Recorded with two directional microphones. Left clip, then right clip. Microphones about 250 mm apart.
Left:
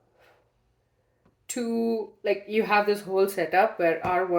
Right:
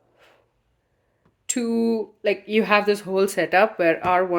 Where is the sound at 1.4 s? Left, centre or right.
Right.